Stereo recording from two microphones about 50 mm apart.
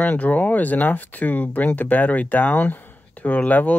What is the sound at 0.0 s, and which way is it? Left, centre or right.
Speech, left.